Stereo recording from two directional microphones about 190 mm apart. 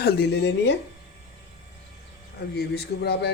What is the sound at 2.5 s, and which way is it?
Speech, 55° left (ahead or behind).